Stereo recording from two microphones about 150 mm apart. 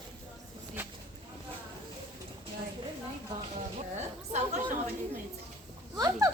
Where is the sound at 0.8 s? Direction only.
10° right (ahead or behind).